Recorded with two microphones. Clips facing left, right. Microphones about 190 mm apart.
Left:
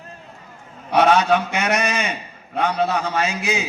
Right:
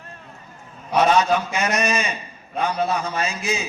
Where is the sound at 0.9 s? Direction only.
70° left (ahead or behind).